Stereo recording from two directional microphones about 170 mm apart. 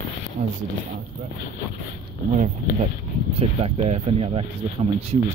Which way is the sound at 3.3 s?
35° right (ahead or behind).